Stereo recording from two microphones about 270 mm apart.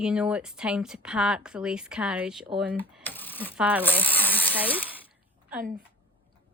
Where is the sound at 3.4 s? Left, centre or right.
Centre.